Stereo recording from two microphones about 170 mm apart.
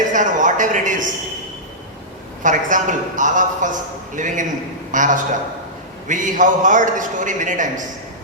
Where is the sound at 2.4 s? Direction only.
50° right (ahead or behind).